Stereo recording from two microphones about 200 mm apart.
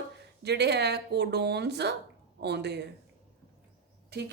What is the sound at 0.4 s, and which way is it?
Speech, 55° right (ahead or behind).